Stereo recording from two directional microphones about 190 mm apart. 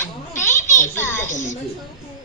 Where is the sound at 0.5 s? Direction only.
40° left (ahead or behind).